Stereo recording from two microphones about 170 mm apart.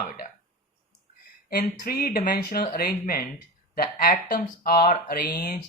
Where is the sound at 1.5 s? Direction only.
60° left (ahead or behind).